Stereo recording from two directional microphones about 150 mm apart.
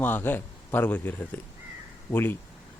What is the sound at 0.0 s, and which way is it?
A man's voice, 15° left (ahead or behind).